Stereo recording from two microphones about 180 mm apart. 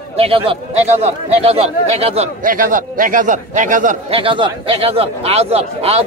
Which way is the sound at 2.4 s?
50° right (ahead or behind).